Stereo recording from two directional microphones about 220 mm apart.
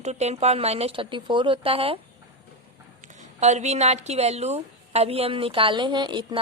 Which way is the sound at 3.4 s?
30° right (ahead or behind).